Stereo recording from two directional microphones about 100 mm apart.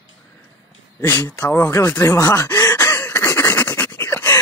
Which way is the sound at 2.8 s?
20° left (ahead or behind).